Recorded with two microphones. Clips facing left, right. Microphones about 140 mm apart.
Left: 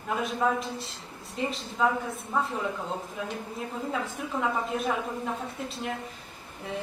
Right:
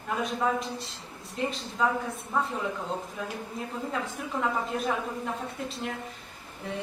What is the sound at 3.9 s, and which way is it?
A woman's voice, centre (ahead or behind).